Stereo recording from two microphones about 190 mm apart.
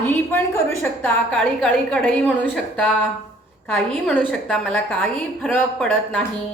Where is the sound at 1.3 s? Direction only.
5° left (ahead or behind).